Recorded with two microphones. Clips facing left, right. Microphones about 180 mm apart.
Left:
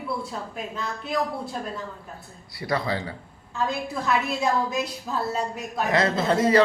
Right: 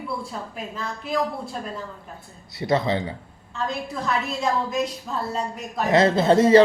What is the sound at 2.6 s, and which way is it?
Speech, 25° right (ahead or behind).